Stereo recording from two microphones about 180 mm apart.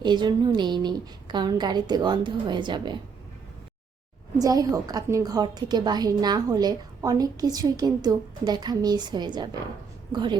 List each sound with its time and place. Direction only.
0.0 s a woman's voice: 25° right (ahead or behind)
4.4 s a woman's voice: 20° right (ahead or behind)